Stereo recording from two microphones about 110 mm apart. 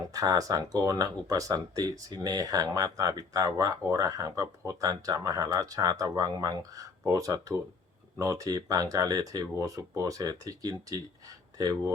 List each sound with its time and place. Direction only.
0.1 s speech: 30° right (ahead or behind)